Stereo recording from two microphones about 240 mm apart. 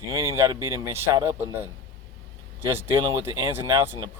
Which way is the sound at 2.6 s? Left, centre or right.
Centre.